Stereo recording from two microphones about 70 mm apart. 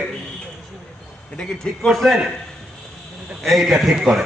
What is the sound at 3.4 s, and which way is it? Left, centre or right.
Speech, centre.